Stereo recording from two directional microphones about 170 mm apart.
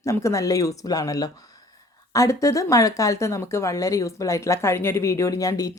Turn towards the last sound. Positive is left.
turn(degrees=20)  # may be behind; listen again after turning